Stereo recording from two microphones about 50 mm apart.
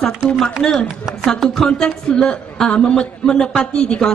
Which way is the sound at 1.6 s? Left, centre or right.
Centre.